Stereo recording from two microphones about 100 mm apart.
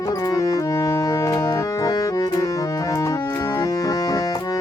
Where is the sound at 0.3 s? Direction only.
40° left (ahead or behind).